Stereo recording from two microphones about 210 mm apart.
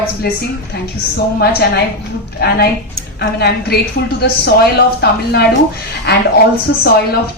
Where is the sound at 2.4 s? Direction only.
50° left (ahead or behind).